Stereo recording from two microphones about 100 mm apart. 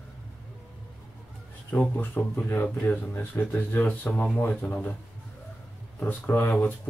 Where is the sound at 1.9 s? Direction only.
20° left (ahead or behind).